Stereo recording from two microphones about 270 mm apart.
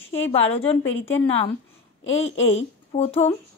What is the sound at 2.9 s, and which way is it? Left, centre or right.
Speech, left.